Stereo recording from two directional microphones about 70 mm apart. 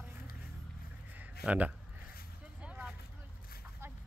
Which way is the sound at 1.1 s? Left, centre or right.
Right.